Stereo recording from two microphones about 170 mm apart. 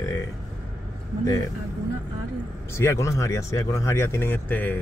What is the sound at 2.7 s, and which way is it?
Speech, 15° left (ahead or behind).